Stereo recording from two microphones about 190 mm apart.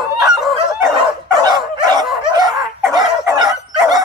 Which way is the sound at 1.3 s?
20° right (ahead or behind).